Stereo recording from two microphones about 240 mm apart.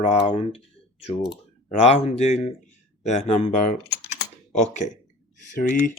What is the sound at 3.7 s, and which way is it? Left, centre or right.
Typing, left.